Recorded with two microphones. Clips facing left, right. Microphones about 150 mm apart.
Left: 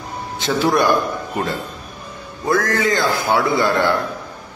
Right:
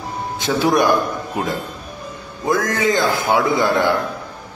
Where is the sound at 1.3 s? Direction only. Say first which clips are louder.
Even; 10° right (ahead or behind).